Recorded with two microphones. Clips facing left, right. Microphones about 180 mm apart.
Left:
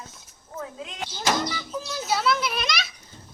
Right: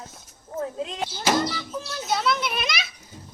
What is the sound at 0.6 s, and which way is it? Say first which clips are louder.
Speech: right 6 dB; 35° right (ahead or behind).